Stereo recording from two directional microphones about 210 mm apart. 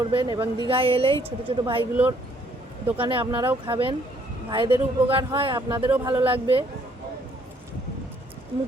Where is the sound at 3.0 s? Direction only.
25° right (ahead or behind).